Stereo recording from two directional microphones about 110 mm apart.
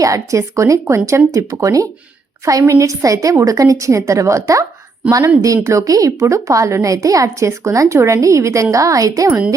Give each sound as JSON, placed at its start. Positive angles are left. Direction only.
{"t": 0.0, "sound": "a woman's voice", "side_deg": -30}
{"t": 5.6, "sound": "a woman's voice", "side_deg": -30}